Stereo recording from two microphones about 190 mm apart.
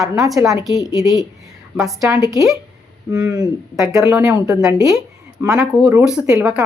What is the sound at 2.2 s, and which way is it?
A woman's voice, 15° right (ahead or behind).